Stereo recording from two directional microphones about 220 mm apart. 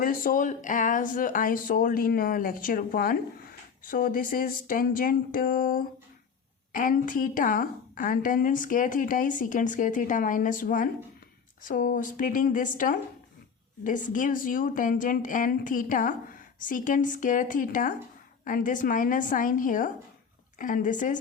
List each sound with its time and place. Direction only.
0.0 s a woman's voice: 40° left (ahead or behind)